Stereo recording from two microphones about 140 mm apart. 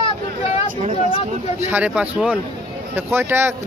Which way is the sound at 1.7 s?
10° right (ahead or behind).